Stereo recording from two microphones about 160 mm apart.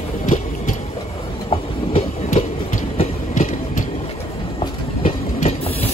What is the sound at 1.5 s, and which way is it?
Train, 40° left (ahead or behind).